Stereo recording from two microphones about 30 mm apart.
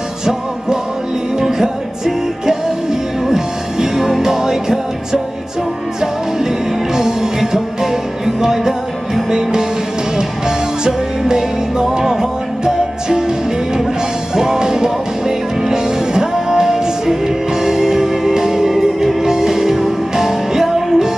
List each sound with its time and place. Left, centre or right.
0.2 s music: right
7.0 s music: centre
10.8 s music: right
14.3 s music: right